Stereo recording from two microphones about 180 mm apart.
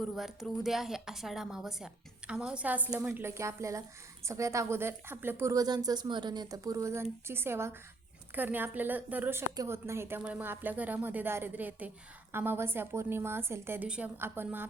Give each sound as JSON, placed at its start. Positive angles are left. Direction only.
{"t": 0.2, "sound": "a woman's voice", "side_deg": 0}